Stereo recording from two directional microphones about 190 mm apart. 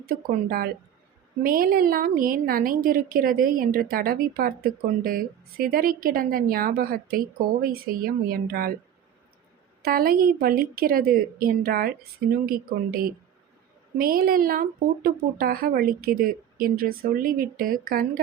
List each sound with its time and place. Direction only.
0.1 s a woman's voice: 50° right (ahead or behind)
9.8 s a woman's voice: 50° right (ahead or behind)